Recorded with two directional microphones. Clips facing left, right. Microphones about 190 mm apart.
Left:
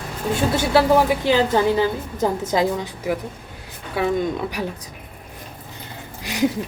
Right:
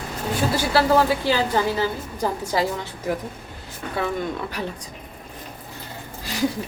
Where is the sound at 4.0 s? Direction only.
10° left (ahead or behind).